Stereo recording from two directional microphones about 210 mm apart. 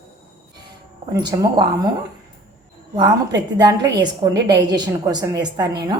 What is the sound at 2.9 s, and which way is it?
A woman's voice, 20° right (ahead or behind).